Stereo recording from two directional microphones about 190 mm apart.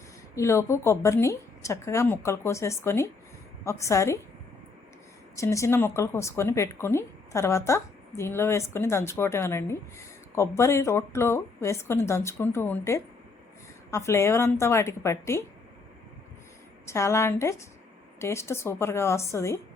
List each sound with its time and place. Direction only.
0.3 s speech: 15° left (ahead or behind)
5.4 s speech: 15° left (ahead or behind)
16.8 s speech: 15° left (ahead or behind)